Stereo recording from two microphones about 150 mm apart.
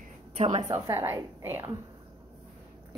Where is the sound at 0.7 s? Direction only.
20° right (ahead or behind).